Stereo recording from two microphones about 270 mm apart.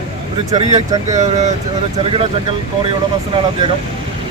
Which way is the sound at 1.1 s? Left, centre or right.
Right.